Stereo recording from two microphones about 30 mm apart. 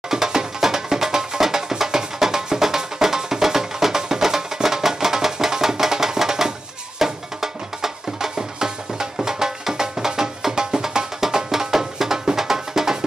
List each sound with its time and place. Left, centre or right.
0.1 s music: centre